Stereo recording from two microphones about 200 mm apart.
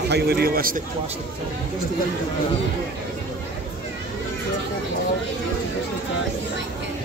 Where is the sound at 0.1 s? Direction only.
50° right (ahead or behind).